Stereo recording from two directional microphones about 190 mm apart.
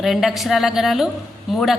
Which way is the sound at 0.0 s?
Centre (ahead or behind).